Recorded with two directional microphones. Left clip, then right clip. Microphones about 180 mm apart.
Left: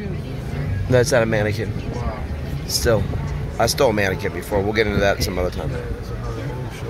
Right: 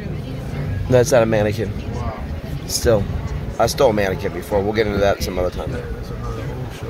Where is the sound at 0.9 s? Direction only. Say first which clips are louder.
Right 3 dB; 15° right (ahead or behind).